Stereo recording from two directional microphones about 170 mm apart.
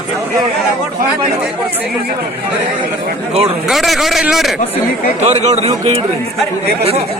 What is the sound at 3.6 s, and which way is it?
Speech, centre (ahead or behind).